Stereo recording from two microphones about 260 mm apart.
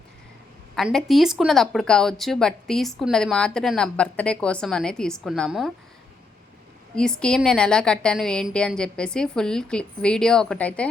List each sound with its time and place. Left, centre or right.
0.8 s speech: centre
6.9 s speech: centre